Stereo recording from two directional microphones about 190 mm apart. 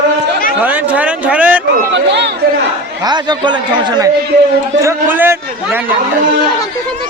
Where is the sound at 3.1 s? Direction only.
25° right (ahead or behind).